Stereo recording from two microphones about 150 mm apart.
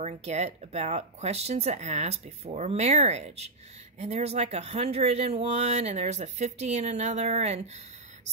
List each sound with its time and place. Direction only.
0.0 s speech: 50° right (ahead or behind)